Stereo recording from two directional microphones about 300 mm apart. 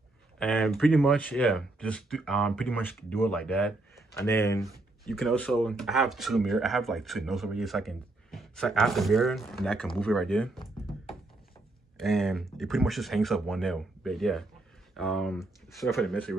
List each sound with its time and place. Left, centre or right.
0.4 s speech: centre
12.0 s speech: centre